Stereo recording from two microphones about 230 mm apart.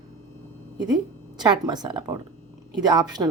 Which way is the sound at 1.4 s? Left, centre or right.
Centre.